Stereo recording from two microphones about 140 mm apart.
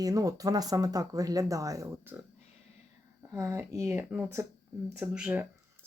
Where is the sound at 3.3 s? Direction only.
20° right (ahead or behind).